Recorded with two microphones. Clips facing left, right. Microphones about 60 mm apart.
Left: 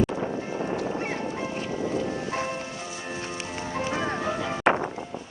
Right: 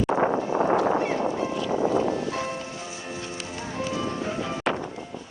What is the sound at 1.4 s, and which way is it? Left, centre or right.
Music, left.